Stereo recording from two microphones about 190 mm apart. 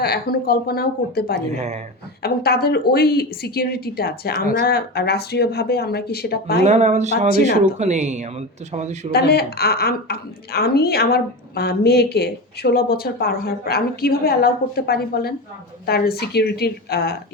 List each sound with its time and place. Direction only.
0.0 s a woman's voice: 55° left (ahead or behind)
1.4 s speech: 40° right (ahead or behind)
2.2 s a woman's voice: 55° left (ahead or behind)
6.7 s speech: 40° right (ahead or behind)
7.3 s a woman's voice: 55° left (ahead or behind)
7.8 s speech: 35° right (ahead or behind)
9.1 s a woman's voice: 55° left (ahead or behind)